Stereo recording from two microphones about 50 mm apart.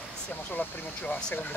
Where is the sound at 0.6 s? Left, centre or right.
Left.